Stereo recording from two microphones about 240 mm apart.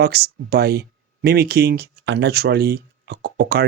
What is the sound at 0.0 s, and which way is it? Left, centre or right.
Speech, right.